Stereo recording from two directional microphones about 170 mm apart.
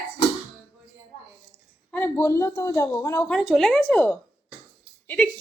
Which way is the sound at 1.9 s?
10° left (ahead or behind).